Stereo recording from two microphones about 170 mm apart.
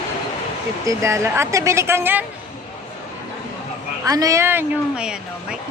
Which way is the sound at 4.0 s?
20° right (ahead or behind).